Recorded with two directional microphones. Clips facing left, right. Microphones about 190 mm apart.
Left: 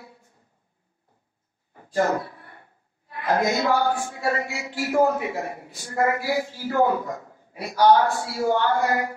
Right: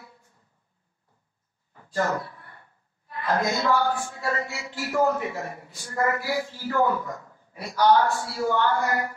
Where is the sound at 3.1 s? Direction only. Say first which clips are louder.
Left 3 dB; 15° left (ahead or behind).